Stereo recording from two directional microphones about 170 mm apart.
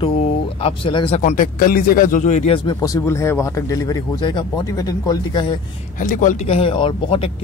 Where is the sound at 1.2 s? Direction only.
50° left (ahead or behind).